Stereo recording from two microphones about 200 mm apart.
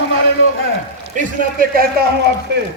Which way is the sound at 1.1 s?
45° right (ahead or behind).